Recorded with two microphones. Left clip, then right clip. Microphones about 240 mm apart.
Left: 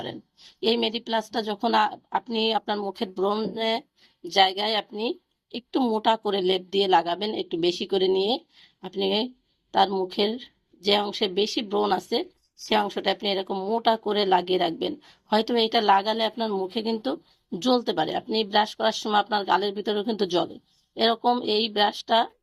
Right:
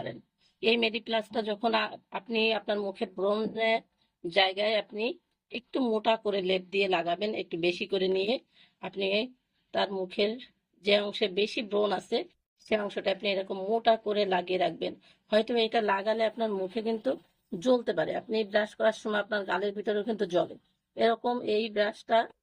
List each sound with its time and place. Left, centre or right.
0.6 s speech: left